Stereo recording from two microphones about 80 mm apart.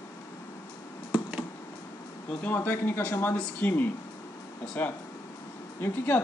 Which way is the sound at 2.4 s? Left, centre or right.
Left.